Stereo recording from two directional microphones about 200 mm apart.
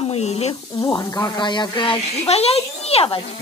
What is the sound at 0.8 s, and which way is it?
A woman's voice, 20° left (ahead or behind).